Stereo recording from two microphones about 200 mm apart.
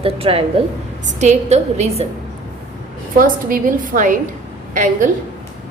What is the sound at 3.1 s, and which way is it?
A woman's voice, 45° right (ahead or behind).